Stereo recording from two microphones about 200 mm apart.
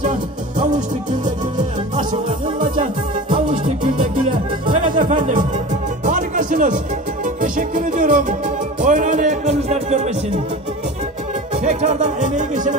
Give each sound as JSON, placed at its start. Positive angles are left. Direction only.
{"t": 0.0, "sound": "music", "side_deg": -40}
{"t": 4.8, "sound": "music", "side_deg": -40}
{"t": 11.5, "sound": "music", "side_deg": -35}